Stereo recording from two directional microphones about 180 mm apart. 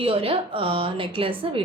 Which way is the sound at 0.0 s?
30° right (ahead or behind).